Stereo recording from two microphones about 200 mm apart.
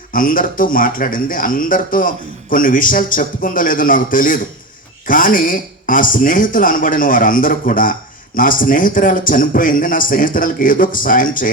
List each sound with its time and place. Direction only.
0.1 s speech: 45° left (ahead or behind)